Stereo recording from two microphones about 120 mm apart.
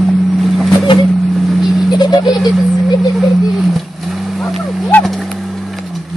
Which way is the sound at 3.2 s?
Centre (ahead or behind).